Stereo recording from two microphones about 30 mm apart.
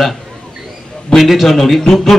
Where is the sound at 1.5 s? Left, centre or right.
Centre.